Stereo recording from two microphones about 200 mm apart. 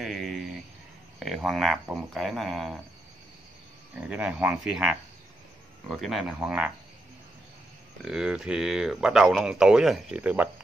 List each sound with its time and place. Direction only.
0.0 s speech: centre (ahead or behind)
3.9 s speech: 5° right (ahead or behind)
8.0 s speech: 5° right (ahead or behind)